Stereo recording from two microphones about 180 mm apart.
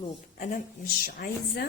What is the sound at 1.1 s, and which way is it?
Speech, 55° left (ahead or behind).